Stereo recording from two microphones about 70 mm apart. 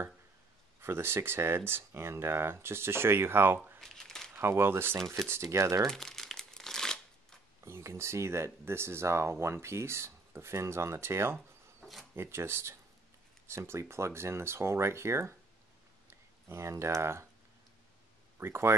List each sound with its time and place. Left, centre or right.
0.7 s speech: right
3.5 s a sound: right
3.8 s crumpling: centre
4.4 s speech: right
5.9 s crumpling: centre
7.6 s speech: right
11.3 s a sound: centre
12.2 s speech: right
18.4 s speech: right